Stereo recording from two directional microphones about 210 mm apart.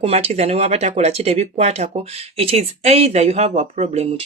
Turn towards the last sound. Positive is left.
turn(degrees=-30)  # may be behind; listen again after turning